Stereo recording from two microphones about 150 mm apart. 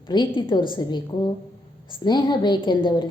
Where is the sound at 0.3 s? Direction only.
35° left (ahead or behind).